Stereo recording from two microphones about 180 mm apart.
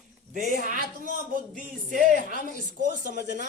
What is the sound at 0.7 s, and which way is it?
A man's voice, 45° right (ahead or behind).